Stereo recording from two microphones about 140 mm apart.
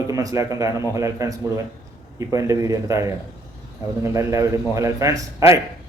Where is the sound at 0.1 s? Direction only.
25° right (ahead or behind).